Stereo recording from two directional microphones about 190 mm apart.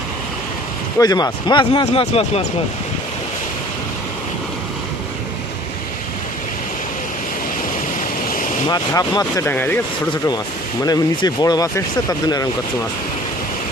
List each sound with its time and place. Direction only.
0.9 s speech: 20° left (ahead or behind)
8.9 s speech: 20° left (ahead or behind)
10.8 s speech: 20° left (ahead or behind)